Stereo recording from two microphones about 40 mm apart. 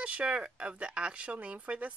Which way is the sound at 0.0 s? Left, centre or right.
Right.